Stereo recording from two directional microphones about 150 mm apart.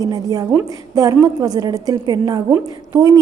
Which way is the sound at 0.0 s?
25° right (ahead or behind).